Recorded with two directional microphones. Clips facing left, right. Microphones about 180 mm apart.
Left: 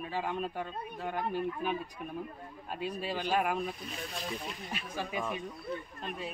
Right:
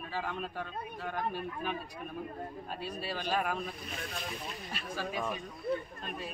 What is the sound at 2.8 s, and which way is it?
Speech, 15° left (ahead or behind).